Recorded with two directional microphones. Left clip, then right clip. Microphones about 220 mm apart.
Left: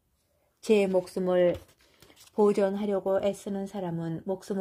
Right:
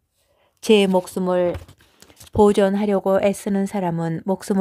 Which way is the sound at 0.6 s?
25° right (ahead or behind).